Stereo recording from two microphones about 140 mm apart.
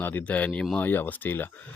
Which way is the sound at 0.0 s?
10° left (ahead or behind).